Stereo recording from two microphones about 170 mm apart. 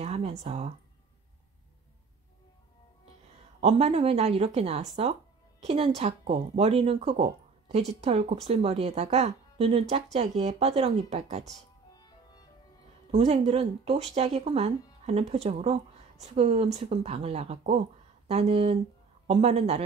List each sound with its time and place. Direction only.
0.0 s a sound: 40° right (ahead or behind)
3.6 s speech: 35° right (ahead or behind)
13.1 s speech: 40° right (ahead or behind)